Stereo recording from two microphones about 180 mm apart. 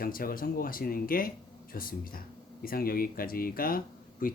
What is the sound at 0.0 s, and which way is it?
Speech, 55° left (ahead or behind).